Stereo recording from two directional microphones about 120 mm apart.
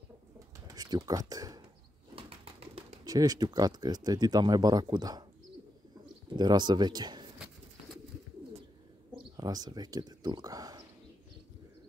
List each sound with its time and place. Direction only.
0.7 s speech: 35° right (ahead or behind)
2.1 s bird: 55° right (ahead or behind)
3.1 s speech: 30° right (ahead or behind)
6.3 s speech: 35° right (ahead or behind)
9.1 s speech: 35° right (ahead or behind)